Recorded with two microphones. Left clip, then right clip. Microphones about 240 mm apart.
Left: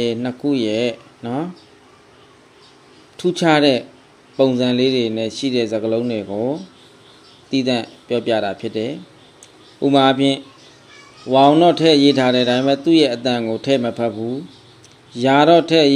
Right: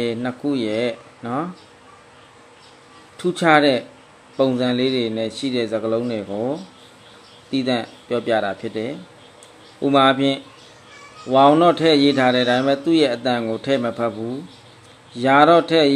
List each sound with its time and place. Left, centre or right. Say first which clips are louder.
0.0 s a man's voice: left 3 dB; left
3.2 s a man's voice: even; centre
7.5 s a man's voice: left 2 dB; centre
15.1 s a man's voice: left 1 dB; left